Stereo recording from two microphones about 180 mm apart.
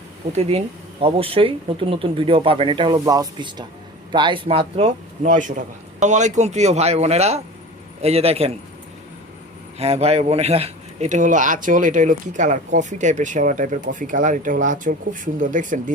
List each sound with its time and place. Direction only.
1.0 s a man's voice: 30° right (ahead or behind)
9.7 s speech: 35° right (ahead or behind)